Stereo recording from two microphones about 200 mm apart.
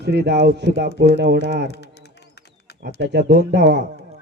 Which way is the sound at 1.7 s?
60° left (ahead or behind).